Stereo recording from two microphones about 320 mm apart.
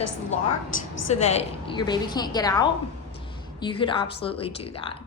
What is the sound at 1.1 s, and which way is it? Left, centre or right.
A woman's voice, centre.